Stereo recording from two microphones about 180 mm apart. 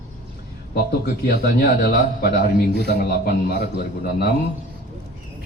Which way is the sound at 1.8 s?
55° left (ahead or behind).